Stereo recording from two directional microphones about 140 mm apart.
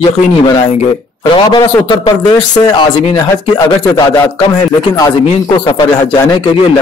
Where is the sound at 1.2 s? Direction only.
35° left (ahead or behind).